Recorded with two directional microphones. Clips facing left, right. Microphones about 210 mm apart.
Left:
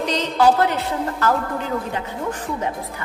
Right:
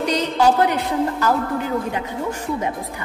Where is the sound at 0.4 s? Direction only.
15° right (ahead or behind).